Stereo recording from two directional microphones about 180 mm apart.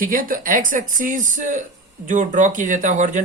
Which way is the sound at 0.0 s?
50° right (ahead or behind).